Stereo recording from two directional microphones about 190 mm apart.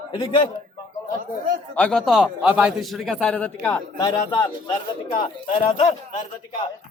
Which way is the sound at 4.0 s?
20° left (ahead or behind).